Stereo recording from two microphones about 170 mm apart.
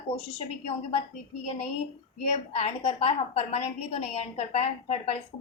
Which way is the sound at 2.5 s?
40° left (ahead or behind).